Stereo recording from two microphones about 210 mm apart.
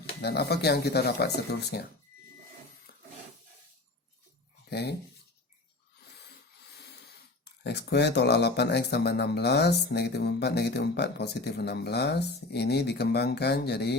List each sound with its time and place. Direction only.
0.2 s speech: 50° left (ahead or behind)
4.7 s speech: 50° left (ahead or behind)
7.6 s speech: 50° left (ahead or behind)